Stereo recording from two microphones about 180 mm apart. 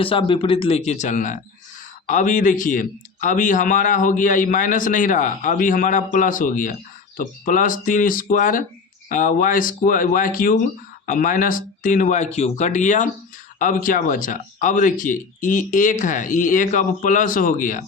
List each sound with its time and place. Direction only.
0.0 s speech: 30° left (ahead or behind); by 17.8 s 45° left (ahead or behind)